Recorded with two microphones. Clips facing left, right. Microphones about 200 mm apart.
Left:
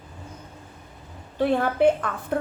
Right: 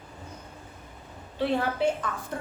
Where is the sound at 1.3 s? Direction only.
50° left (ahead or behind).